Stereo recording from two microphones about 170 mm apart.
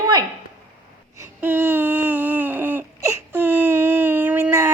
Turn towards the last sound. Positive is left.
turn(degrees=-15)  # may be behind; listen again after turning